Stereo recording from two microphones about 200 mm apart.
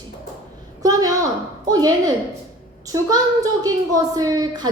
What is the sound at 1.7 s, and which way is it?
A woman's voice, 20° right (ahead or behind).